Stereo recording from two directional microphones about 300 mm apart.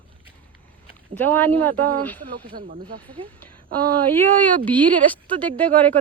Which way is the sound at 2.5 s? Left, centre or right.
Right.